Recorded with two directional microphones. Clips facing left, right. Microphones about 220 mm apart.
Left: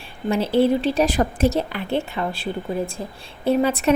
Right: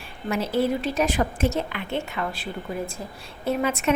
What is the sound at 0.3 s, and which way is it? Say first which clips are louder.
A woman's voice: left 5 dB; 30° left (ahead or behind).